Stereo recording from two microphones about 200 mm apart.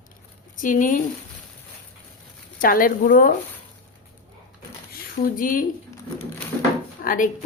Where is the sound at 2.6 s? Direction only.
45° left (ahead or behind).